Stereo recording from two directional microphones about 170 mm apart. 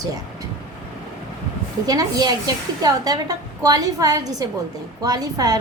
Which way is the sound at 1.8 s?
20° right (ahead or behind).